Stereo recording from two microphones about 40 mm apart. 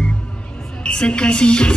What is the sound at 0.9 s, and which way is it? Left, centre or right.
Music, left.